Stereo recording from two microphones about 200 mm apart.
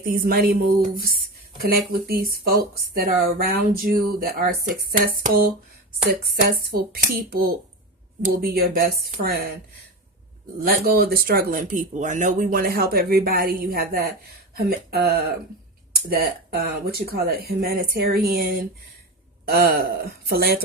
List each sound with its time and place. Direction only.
0.0 s speech: 45° right (ahead or behind)
1.9 s speech: 50° right (ahead or behind)
10.6 s speech: 50° right (ahead or behind)